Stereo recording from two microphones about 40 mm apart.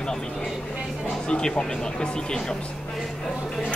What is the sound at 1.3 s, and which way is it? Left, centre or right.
Speech, left.